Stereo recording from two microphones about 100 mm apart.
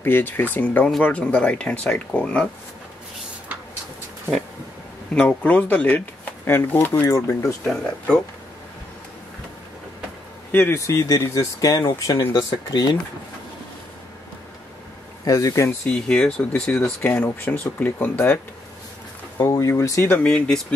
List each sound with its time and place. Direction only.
0.0 s speech: 20° left (ahead or behind)
5.1 s speech: 15° left (ahead or behind)
7.1 s speech: 35° left (ahead or behind)
7.6 s speech: 10° left (ahead or behind)
10.5 s speech: 25° left (ahead or behind); by 13.0 s 45° left (ahead or behind)
15.2 s speech: 35° left (ahead or behind)
15.8 s speech: 10° left (ahead or behind)
19.3 s speech: 30° left (ahead or behind)
20.2 s speech: 5° left (ahead or behind)